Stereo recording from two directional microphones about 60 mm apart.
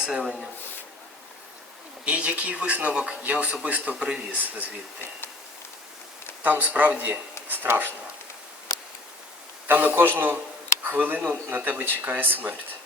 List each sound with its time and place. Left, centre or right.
0.0 s speech: centre
2.0 s speech: right
6.4 s speech: right
7.4 s a sound: right
7.7 s a man's voice: right
9.6 s a man's voice: right